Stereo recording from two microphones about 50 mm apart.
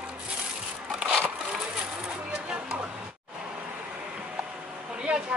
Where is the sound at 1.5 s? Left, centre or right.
Centre.